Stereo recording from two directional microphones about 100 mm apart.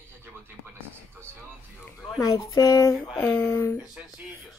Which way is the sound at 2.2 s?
35° left (ahead or behind).